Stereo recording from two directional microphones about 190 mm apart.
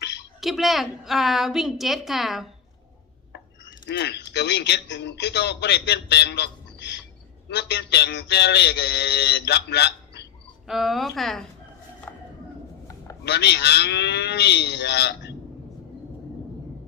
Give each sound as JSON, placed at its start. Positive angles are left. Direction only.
{"t": 0.3, "sound": "a woman's voice", "side_deg": 0}
{"t": 3.6, "sound": "a man's voice", "side_deg": 70}
{"t": 10.7, "sound": "a woman's voice", "side_deg": 0}
{"t": 12.1, "sound": "bird", "side_deg": 10}
{"t": 13.2, "sound": "a man's voice", "side_deg": 60}